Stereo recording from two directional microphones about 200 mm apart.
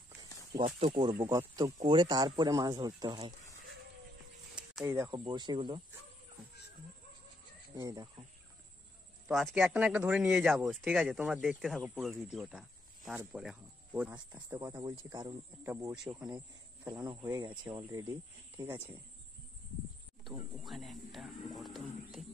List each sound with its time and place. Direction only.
0.2 s a sound: 20° right (ahead or behind)
0.7 s speech: 30° right (ahead or behind)
1.1 s speech: 15° right (ahead or behind)
4.6 s speech: 5° right (ahead or behind); by 5.8 s 25° right (ahead or behind)
7.7 s speech: 20° right (ahead or behind)
9.3 s speech: centre (ahead or behind)
14.1 s speech: 20° right (ahead or behind)
16.2 s speech: 20° right (ahead or behind)
20.2 s speech: centre (ahead or behind)
21.5 s a sound: centre (ahead or behind)